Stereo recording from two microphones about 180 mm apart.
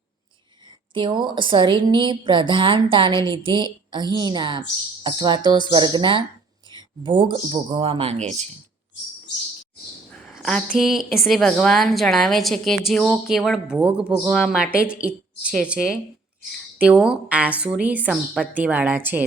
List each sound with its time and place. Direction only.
0.6 s a woman's voice: 25° right (ahead or behind)
10.1 s a woman's voice: centre (ahead or behind)